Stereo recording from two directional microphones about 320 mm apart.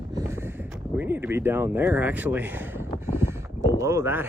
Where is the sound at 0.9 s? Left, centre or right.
Centre.